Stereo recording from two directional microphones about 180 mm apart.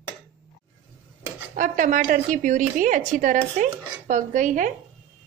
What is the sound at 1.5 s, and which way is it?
Speech, 45° right (ahead or behind).